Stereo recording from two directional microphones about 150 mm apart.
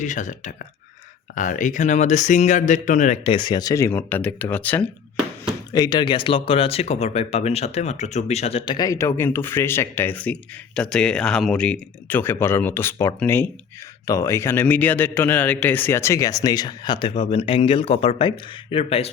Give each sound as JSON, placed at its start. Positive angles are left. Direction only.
{"t": 0.0, "sound": "speech", "side_deg": 55}
{"t": 3.3, "sound": "speech", "side_deg": 30}
{"t": 5.7, "sound": "a man's voice", "side_deg": 25}